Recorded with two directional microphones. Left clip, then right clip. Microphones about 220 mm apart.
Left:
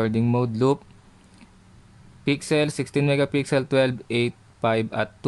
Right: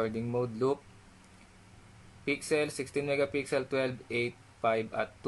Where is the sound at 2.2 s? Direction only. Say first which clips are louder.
Left 8 dB; 45° left (ahead or behind).